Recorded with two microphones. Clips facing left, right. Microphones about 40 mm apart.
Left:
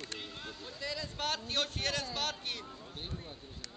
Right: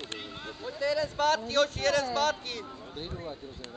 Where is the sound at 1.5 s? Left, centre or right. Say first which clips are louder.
Right 9 dB; centre.